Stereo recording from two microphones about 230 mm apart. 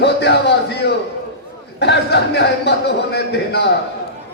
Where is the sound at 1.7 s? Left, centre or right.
Left.